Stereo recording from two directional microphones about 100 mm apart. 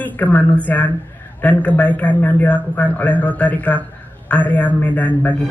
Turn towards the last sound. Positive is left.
turn(degrees=15)  # may be behind; listen again after turning